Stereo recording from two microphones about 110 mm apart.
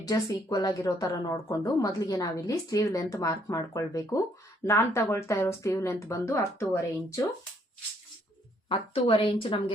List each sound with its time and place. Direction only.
0.0 s a woman's voice: 35° left (ahead or behind)
8.7 s a woman's voice: 50° left (ahead or behind)